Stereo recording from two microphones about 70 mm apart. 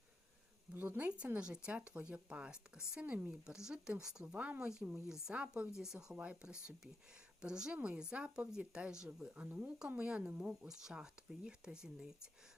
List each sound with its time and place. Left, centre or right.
0.7 s speech: right; by 12.3 s centre